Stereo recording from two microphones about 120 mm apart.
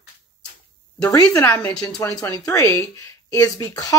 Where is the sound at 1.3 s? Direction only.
20° left (ahead or behind).